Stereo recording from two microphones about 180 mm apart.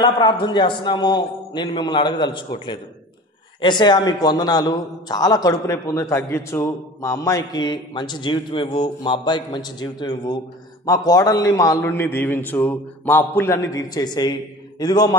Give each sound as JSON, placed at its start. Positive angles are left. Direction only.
{"t": 0.0, "sound": "a man's voice", "side_deg": 25}